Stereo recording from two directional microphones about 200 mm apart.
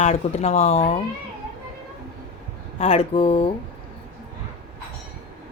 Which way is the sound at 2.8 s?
30° left (ahead or behind).